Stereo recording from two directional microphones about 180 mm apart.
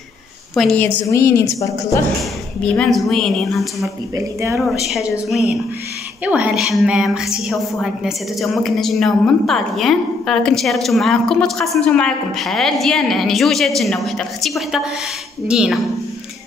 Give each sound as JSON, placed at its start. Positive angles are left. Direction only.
{"t": 0.6, "sound": "a woman's voice", "side_deg": 5}
{"t": 2.6, "sound": "a woman's voice", "side_deg": 5}
{"t": 4.1, "sound": "speech", "side_deg": -15}
{"t": 4.8, "sound": "a woman's voice", "side_deg": 0}